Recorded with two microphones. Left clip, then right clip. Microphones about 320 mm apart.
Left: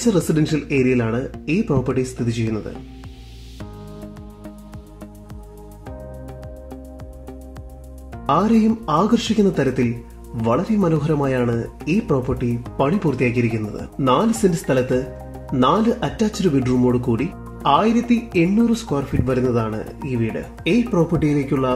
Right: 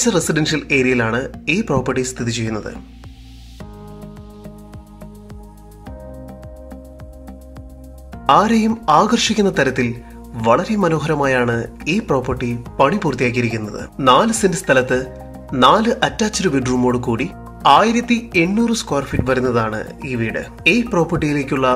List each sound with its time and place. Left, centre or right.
0.0 s speech: right
8.3 s speech: right